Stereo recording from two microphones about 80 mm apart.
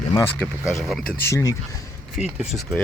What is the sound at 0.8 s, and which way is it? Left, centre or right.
Speech, centre.